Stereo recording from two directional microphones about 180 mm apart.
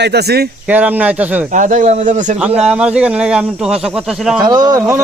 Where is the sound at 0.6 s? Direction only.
10° right (ahead or behind).